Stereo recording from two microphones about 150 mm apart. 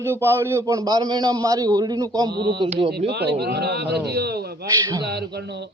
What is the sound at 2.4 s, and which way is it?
A man's voice, 90° right.